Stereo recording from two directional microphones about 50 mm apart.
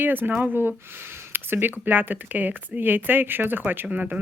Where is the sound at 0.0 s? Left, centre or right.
Right.